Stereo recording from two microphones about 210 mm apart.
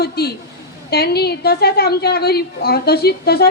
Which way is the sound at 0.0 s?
50° left (ahead or behind).